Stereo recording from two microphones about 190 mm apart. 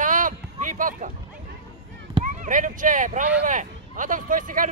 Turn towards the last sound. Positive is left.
turn(degrees=-45)  # may be behind; listen again after turning